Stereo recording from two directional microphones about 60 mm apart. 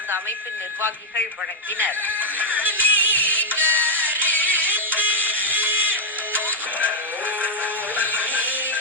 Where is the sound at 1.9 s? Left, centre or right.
Left.